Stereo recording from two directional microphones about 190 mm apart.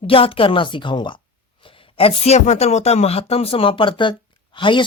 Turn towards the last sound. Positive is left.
turn(degrees=25)  # may be behind; listen again after turning